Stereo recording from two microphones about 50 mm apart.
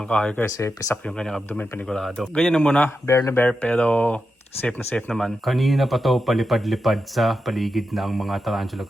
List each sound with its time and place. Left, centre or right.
0.1 s speech: centre
3.1 s speech: left
3.3 s speech: left
3.7 s speech: left
5.0 s speech: centre
5.5 s speech: centre